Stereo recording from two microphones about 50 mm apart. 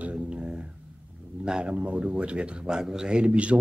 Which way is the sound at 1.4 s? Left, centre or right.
Right.